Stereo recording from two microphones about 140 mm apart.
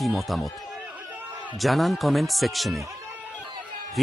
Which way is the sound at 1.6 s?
Centre (ahead or behind).